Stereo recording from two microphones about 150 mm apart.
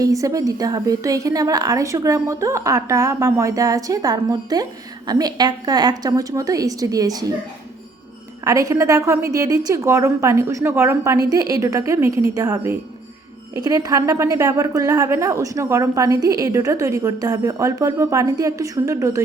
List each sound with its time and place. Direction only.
0.0 s a woman's voice: 20° right (ahead or behind)
8.4 s a woman's voice: 20° right (ahead or behind)